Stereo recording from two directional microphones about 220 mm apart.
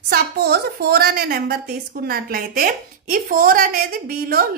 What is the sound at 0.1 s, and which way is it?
A woman's voice, 45° right (ahead or behind).